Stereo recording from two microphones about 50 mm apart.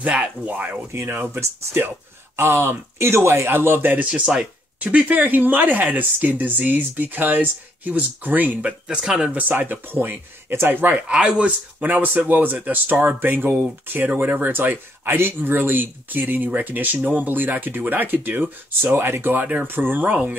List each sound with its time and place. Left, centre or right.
1.0 s speech: right
2.3 s speech: right
4.0 s speech: right
4.7 s speech: right
8.8 s speech: centre
9.5 s speech: right
11.1 s speech: right
11.8 s speech: right
19.4 s speech: right
19.7 s speech: right